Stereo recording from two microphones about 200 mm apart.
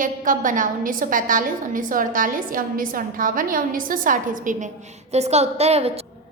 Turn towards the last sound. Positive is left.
turn(degrees=-30)  # may be behind; listen again after turning